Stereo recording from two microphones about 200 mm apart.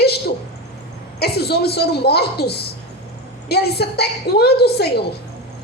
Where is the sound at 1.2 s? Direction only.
55° left (ahead or behind).